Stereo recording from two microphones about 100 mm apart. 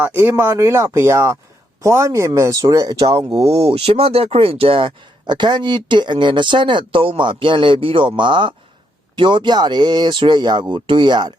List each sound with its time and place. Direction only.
0.0 s speech: 20° right (ahead or behind); by 2.9 s 40° right (ahead or behind)
3.0 s speech: 70° right (ahead or behind)
3.4 s speech: 85° right; by 11.3 s 50° right (ahead or behind)